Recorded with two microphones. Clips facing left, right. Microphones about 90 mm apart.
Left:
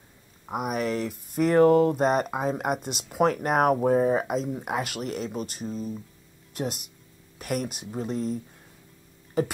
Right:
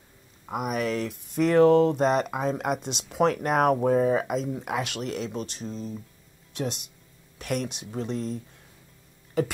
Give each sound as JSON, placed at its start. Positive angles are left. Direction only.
{"t": 0.5, "sound": "speech", "side_deg": 5}